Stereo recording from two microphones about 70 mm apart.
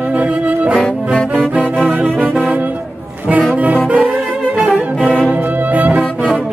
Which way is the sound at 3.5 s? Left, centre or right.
Right.